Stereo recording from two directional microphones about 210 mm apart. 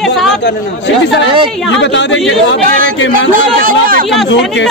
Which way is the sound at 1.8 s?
60° left (ahead or behind).